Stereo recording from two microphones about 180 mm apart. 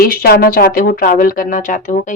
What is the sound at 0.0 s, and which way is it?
A woman's voice, 55° left (ahead or behind).